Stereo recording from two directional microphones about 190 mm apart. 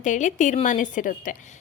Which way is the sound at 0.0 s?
40° left (ahead or behind).